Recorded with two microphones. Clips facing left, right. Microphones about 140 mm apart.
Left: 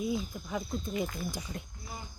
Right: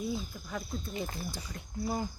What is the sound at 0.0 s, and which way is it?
Speech, 15° left (ahead or behind).